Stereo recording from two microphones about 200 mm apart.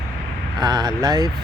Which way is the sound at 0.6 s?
20° right (ahead or behind).